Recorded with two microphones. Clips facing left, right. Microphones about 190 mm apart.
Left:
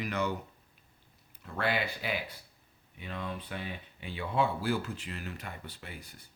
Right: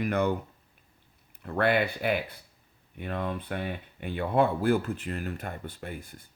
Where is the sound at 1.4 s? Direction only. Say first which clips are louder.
Right 7 dB; 55° right (ahead or behind).